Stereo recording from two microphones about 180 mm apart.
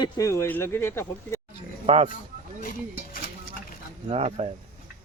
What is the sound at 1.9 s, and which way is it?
Speech, 35° right (ahead or behind).